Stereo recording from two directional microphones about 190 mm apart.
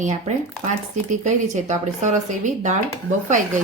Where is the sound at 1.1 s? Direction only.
40° right (ahead or behind).